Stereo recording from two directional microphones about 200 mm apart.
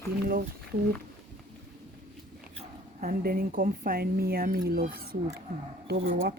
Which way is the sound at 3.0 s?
45° right (ahead or behind).